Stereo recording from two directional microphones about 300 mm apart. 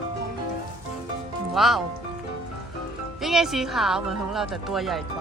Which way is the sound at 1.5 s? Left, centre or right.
Centre.